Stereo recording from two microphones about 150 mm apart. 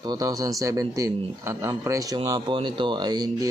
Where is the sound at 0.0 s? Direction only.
25° right (ahead or behind).